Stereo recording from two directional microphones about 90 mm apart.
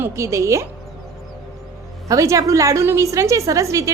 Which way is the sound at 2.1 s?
35° right (ahead or behind).